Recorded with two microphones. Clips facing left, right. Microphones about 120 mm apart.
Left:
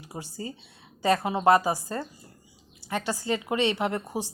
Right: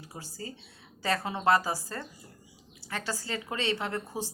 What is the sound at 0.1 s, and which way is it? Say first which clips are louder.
Speech: left 6 dB; 20° left (ahead or behind).